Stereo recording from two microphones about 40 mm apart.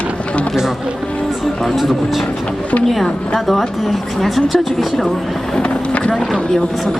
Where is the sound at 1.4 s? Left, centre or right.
Centre.